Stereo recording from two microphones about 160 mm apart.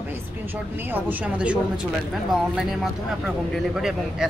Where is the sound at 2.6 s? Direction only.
Centre (ahead or behind).